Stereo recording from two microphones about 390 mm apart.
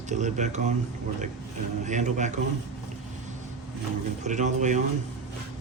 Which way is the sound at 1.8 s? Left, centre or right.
Centre.